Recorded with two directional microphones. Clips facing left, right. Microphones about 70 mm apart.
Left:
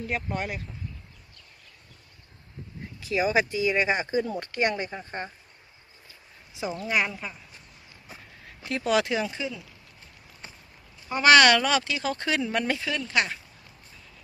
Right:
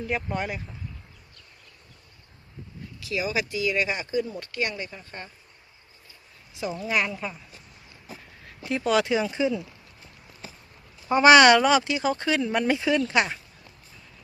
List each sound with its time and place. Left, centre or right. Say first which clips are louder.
0.0 s speech: right 2 dB; centre
3.0 s speech: left 4 dB; left
6.9 s speech: right 1 dB; centre
8.4 s speech: right 2 dB; centre
9.4 s speech: right 9 dB; centre
11.1 s speech: right 3 dB; centre